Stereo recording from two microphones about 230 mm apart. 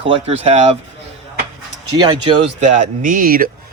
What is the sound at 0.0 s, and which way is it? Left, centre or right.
Speech, right.